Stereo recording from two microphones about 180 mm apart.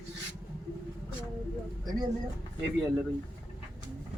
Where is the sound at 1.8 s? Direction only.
20° right (ahead or behind).